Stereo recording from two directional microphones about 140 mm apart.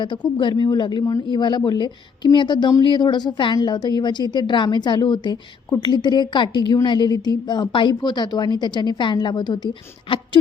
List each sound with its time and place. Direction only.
0.3 s speech: 35° left (ahead or behind)